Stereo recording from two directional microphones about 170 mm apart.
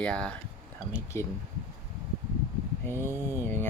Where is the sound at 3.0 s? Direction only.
15° right (ahead or behind).